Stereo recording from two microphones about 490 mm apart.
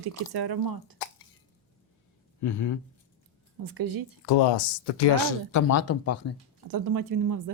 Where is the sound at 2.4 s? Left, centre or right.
Left.